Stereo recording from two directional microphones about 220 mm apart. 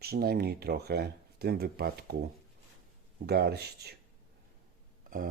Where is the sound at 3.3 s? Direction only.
45° right (ahead or behind).